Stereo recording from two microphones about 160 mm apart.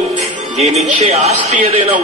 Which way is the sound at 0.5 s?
45° right (ahead or behind).